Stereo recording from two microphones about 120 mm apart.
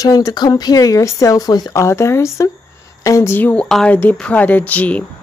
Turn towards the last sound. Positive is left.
turn(degrees=10)  # may be behind; listen again after turning